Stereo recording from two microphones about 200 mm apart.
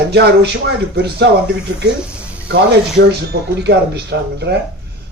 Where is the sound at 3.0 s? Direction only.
55° right (ahead or behind).